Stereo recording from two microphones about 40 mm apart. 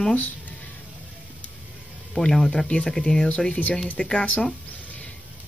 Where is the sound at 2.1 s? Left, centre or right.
Centre.